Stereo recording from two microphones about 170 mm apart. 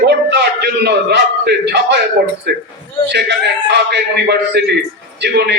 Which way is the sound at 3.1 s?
85° right.